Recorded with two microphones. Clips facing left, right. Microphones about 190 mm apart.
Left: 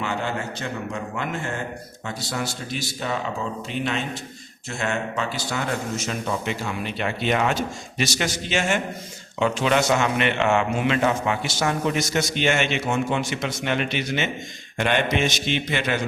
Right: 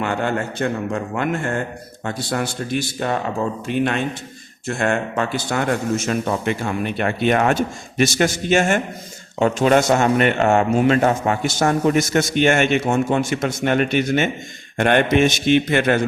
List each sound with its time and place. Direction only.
0.0 s a man's voice: 55° right (ahead or behind)